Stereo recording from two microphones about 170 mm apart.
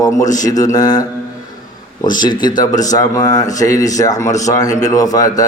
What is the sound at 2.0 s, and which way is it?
A man's voice, 25° left (ahead or behind).